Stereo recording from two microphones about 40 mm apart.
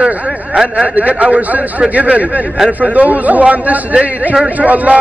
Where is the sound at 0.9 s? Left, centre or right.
Right.